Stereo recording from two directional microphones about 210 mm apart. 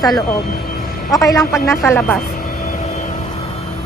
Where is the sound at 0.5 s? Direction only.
45° left (ahead or behind).